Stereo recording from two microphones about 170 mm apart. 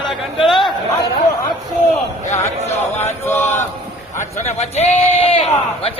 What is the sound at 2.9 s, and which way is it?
Chant, 15° left (ahead or behind).